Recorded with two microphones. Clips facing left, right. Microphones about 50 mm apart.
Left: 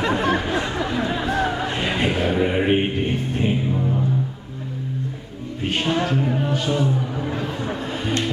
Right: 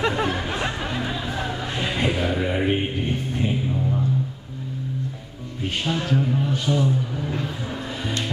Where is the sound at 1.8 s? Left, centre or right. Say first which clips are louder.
Right 1 dB; left.